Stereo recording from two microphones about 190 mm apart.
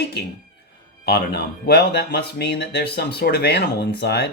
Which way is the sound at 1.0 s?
55° left (ahead or behind).